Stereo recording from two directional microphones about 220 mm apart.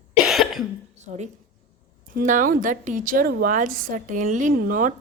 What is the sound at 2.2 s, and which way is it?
A woman's voice, 35° right (ahead or behind).